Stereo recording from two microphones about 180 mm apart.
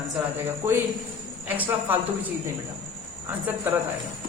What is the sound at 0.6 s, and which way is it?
Speech, 10° right (ahead or behind).